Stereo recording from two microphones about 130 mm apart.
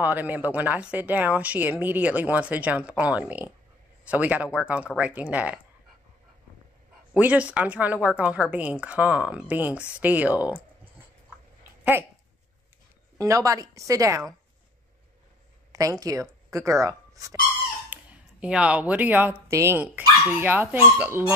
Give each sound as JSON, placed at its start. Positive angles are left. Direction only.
{"t": 0.0, "sound": "speech", "side_deg": -15}
{"t": 7.2, "sound": "speech", "side_deg": -10}
{"t": 11.8, "sound": "dog", "side_deg": -15}
{"t": 13.2, "sound": "a woman's voice", "side_deg": -25}
{"t": 15.7, "sound": "speech", "side_deg": -25}
{"t": 17.9, "sound": "a sound", "side_deg": -15}
{"t": 18.4, "sound": "a woman's voice", "side_deg": -10}